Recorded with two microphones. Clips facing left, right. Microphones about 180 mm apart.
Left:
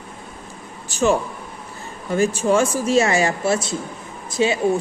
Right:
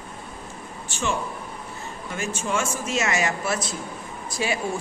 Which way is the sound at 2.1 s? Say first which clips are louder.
Left 10 dB; 35° left (ahead or behind).